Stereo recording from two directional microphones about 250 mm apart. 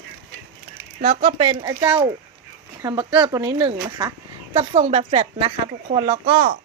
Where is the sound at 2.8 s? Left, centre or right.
Centre.